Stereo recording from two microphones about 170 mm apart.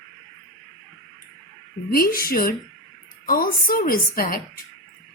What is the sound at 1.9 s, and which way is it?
A woman's voice, 60° left (ahead or behind).